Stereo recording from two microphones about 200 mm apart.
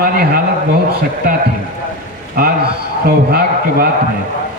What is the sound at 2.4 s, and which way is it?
Speech, 50° right (ahead or behind).